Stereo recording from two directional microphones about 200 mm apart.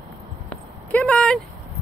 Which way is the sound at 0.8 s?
5° left (ahead or behind).